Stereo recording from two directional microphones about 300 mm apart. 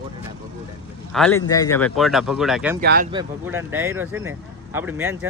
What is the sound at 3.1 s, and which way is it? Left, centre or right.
Speech, centre.